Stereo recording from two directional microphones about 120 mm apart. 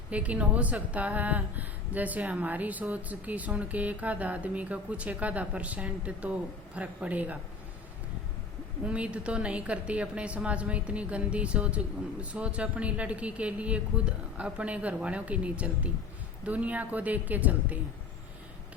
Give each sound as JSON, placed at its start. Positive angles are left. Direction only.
{"t": 0.1, "sound": "a woman's voice", "side_deg": -10}
{"t": 8.8, "sound": "a woman's voice", "side_deg": -10}